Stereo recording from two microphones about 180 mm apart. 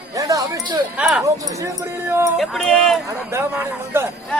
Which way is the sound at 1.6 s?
15° right (ahead or behind).